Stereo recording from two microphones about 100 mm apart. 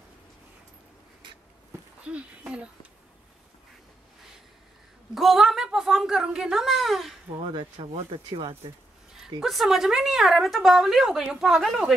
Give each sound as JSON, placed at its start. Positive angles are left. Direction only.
{"t": 2.0, "sound": "speech", "side_deg": -10}
{"t": 5.1, "sound": "a sound", "side_deg": -5}
{"t": 7.4, "sound": "speech", "side_deg": -60}
{"t": 9.4, "sound": "a woman's voice", "side_deg": -5}